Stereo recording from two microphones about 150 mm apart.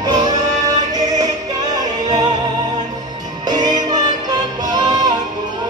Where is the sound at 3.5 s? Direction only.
30° right (ahead or behind).